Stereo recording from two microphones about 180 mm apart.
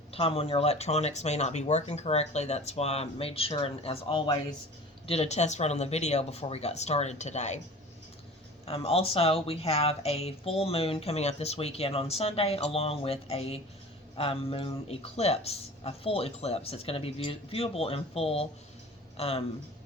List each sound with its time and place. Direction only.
0.1 s speech: 35° left (ahead or behind)
8.6 s speech: 30° left (ahead or behind)